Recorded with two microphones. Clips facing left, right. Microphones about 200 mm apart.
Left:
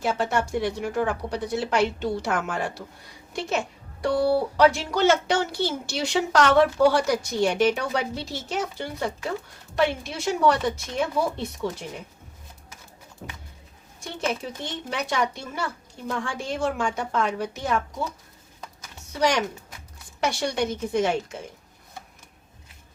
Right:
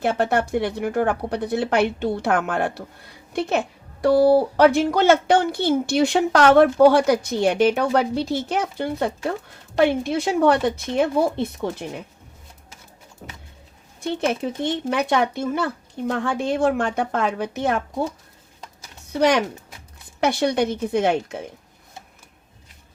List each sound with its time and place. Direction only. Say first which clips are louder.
0.0 s a woman's voice: right 4 dB; 60° right (ahead or behind)
4.5 s a woman's voice: right 4 dB; 55° right (ahead or behind)
14.0 s a woman's voice: right 6 dB; 60° right (ahead or behind)
19.2 s a woman's voice: right 5 dB; 55° right (ahead or behind)